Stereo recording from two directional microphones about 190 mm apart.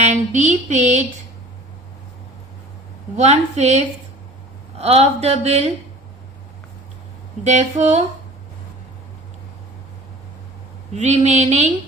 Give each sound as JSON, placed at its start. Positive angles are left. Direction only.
{"t": 0.0, "sound": "speech", "side_deg": -35}
{"t": 3.2, "sound": "a woman's voice", "side_deg": -35}
{"t": 7.4, "sound": "a woman's voice", "side_deg": -40}
{"t": 10.9, "sound": "a woman's voice", "side_deg": -35}